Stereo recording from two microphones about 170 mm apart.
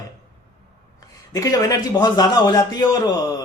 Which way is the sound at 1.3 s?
20° left (ahead or behind).